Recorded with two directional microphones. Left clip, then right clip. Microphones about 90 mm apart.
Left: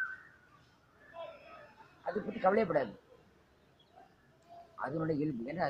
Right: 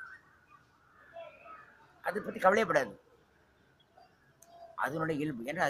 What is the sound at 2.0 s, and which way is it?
Speech, 15° right (ahead or behind).